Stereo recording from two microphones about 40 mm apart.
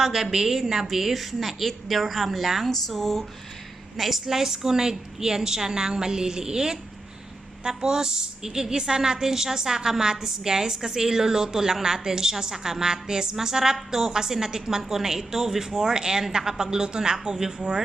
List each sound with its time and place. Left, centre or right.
0.0 s a woman's voice: centre
3.9 s a woman's voice: centre